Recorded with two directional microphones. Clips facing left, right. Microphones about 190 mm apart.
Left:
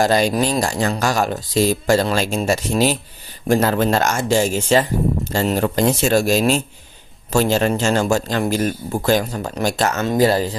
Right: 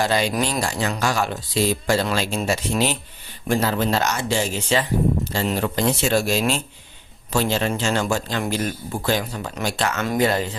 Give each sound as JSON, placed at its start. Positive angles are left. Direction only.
{"t": 0.0, "sound": "speech", "side_deg": 45}
{"t": 3.5, "sound": "speech", "side_deg": 50}
{"t": 10.0, "sound": "speech", "side_deg": 30}